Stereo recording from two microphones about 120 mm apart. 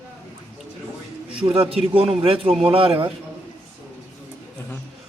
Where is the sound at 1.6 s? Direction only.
50° right (ahead or behind).